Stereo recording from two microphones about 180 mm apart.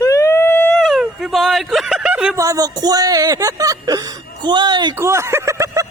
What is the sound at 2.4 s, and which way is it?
Speech, 20° right (ahead or behind).